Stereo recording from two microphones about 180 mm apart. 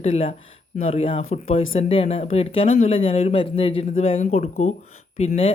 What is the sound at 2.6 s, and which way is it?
Speech, 45° left (ahead or behind).